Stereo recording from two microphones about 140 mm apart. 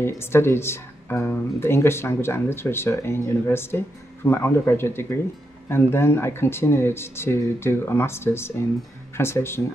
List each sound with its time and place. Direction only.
0.0 s speech: 15° left (ahead or behind)